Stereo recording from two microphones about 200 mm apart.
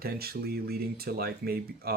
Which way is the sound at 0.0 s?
50° right (ahead or behind).